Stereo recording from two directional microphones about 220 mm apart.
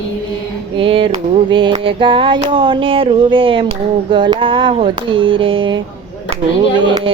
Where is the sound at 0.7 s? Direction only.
25° right (ahead or behind).